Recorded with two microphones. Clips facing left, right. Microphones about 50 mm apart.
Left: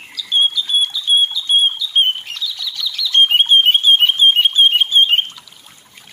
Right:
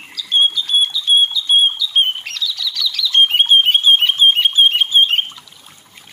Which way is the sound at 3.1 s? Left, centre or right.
Centre.